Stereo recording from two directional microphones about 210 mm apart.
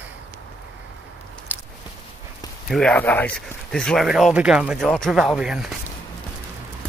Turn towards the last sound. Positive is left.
turn(degrees=0)  # may be behind; listen again after turning